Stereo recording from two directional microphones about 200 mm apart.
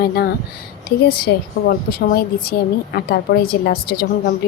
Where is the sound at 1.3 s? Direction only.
65° left (ahead or behind).